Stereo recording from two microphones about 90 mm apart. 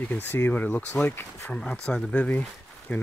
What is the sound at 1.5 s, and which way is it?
Speech, 10° left (ahead or behind).